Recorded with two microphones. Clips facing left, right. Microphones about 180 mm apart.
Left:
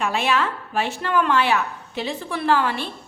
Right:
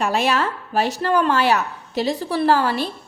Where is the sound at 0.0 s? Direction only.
40° right (ahead or behind).